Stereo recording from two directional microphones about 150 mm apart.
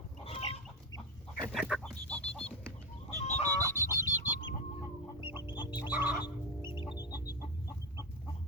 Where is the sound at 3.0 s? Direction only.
45° left (ahead or behind).